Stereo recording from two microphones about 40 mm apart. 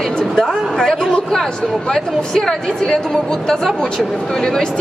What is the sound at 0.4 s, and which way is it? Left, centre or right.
A man's voice, centre.